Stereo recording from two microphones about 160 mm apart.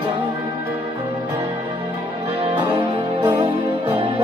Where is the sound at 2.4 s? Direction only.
35° right (ahead or behind).